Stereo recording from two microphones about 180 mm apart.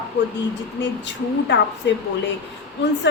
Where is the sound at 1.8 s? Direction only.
75° left (ahead or behind).